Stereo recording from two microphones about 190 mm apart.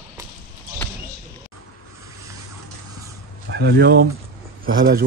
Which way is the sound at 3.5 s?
60° right (ahead or behind).